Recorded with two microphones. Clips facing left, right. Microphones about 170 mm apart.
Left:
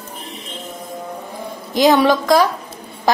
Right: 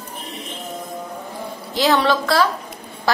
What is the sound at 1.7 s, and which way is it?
Speech, 15° left (ahead or behind).